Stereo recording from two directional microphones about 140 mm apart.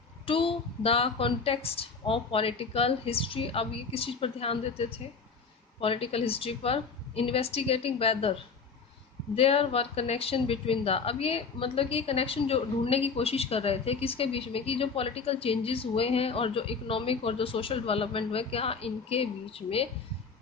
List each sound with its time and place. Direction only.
0.3 s speech: 40° left (ahead or behind)
9.3 s speech: 45° left (ahead or behind)